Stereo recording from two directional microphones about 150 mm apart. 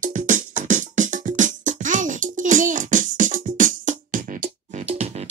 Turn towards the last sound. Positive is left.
turn(degrees=-45)  # may be behind; listen again after turning